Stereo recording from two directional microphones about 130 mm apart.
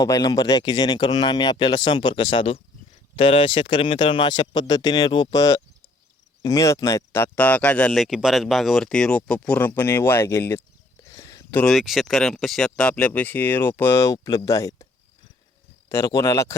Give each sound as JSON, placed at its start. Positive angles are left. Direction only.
{"t": 0.0, "sound": "speech", "side_deg": 30}
{"t": 11.0, "sound": "a sound", "side_deg": 30}
{"t": 11.5, "sound": "speech", "side_deg": 5}
{"t": 15.9, "sound": "speech", "side_deg": 25}